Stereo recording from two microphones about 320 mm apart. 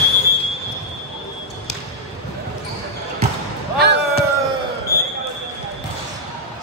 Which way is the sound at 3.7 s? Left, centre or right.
Right.